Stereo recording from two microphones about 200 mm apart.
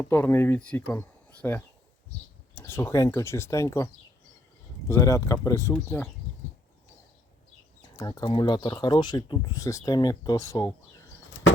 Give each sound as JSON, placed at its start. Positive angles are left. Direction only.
{"t": 0.0, "sound": "speech", "side_deg": 10}
{"t": 4.9, "sound": "speech", "side_deg": 15}
{"t": 7.9, "sound": "speech", "side_deg": 20}